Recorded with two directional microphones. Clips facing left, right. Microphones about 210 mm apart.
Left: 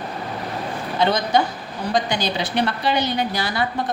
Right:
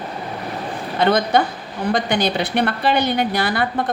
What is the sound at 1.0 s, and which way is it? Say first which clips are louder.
A woman's voice: right 3 dB; 55° right (ahead or behind).